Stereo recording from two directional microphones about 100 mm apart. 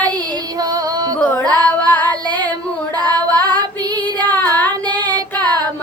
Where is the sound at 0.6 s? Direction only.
40° right (ahead or behind).